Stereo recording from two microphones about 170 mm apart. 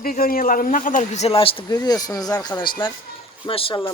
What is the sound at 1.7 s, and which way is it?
Speech, 20° left (ahead or behind).